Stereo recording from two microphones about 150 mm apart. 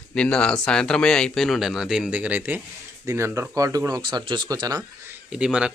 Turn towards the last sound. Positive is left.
turn(degrees=-5)  # may be behind; listen again after turning